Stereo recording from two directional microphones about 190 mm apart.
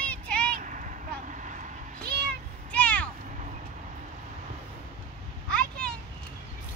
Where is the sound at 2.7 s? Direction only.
5° left (ahead or behind).